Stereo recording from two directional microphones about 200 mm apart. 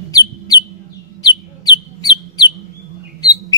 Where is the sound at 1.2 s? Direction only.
20° left (ahead or behind).